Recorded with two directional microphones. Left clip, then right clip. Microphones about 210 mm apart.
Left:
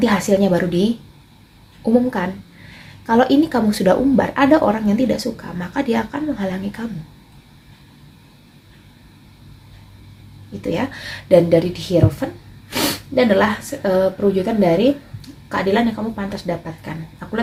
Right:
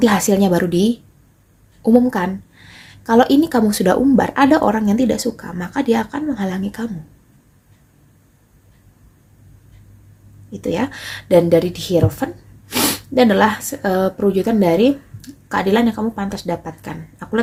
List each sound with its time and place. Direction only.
0.0 s a woman's voice: 45° right (ahead or behind)
10.6 s speech: 40° right (ahead or behind)